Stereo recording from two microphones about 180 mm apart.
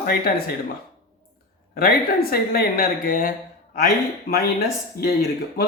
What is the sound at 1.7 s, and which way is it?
Speech, 55° left (ahead or behind).